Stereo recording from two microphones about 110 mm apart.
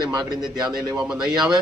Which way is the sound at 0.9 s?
5° right (ahead or behind).